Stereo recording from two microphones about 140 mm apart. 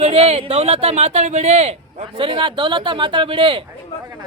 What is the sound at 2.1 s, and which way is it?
Speech, 35° right (ahead or behind).